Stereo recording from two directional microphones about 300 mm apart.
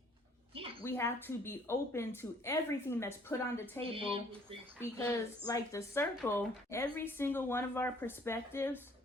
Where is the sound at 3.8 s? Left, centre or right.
Centre.